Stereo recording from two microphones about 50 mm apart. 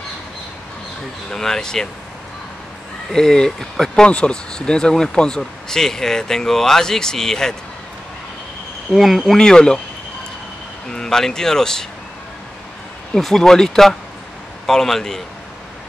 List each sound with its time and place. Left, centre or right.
1.3 s speech: centre
3.1 s speech: centre
4.1 s speech: centre
8.9 s speech: centre
9.4 s speech: centre
10.9 s speech: centre
13.1 s speech: centre